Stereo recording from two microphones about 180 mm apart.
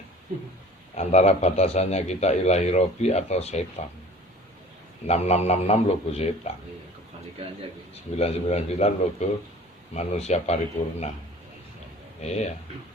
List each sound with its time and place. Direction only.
0.3 s speech: 50° right (ahead or behind)
0.9 s a man's voice: 40° left (ahead or behind)
5.0 s a man's voice: 35° left (ahead or behind)
8.2 s a man's voice: 35° left (ahead or behind)
12.2 s a man's voice: 40° left (ahead or behind)